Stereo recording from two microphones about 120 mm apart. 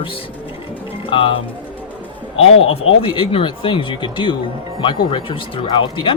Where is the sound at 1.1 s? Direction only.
45° left (ahead or behind).